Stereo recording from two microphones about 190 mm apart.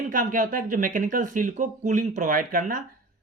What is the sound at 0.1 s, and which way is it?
Speech, 45° right (ahead or behind).